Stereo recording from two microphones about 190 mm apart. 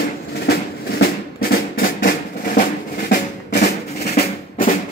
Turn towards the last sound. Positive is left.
turn(degrees=50)  # may be behind; listen again after turning